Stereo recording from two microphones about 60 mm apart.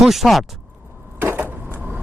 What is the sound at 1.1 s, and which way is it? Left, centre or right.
Vehicle, right.